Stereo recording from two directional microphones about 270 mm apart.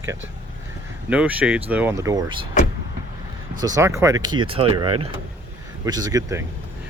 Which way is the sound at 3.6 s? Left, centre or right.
Centre.